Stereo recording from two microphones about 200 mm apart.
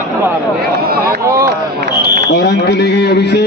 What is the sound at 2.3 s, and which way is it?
A man's voice, 55° left (ahead or behind).